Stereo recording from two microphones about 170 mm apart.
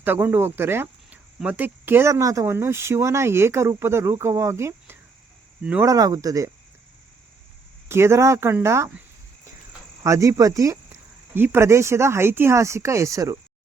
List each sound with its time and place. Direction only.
0.0 s speech: 10° right (ahead or behind)
5.9 s speech: 20° right (ahead or behind)
7.9 s speech: 15° right (ahead or behind)